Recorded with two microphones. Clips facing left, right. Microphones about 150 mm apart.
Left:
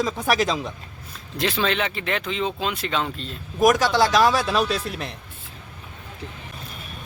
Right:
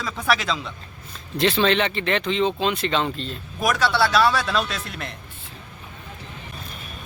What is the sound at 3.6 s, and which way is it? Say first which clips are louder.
Speech: left 5 dB; 40° left (ahead or behind).